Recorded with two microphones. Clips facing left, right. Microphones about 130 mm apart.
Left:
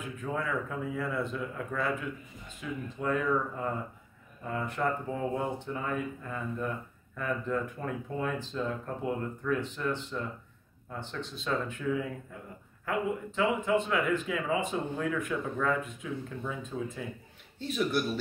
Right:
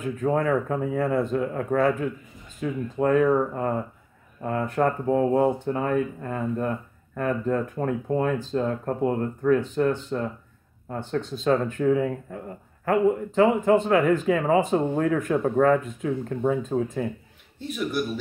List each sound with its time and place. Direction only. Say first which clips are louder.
0.2 s speech: right 10 dB; 50° right (ahead or behind)
17.6 s speech: right 2 dB; 10° right (ahead or behind)